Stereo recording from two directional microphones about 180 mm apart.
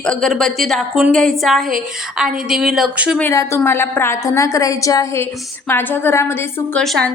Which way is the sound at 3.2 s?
15° left (ahead or behind).